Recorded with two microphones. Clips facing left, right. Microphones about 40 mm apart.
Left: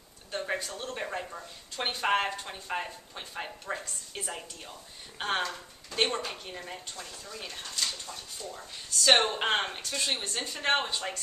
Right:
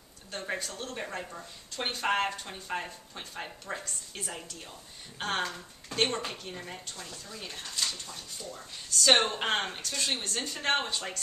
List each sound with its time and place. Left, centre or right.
0.3 s speech: centre